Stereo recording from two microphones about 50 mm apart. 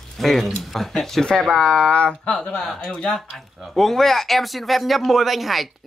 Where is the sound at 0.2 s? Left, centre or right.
Centre.